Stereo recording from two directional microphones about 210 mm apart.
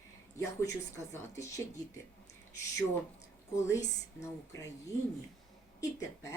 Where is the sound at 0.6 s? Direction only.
15° left (ahead or behind).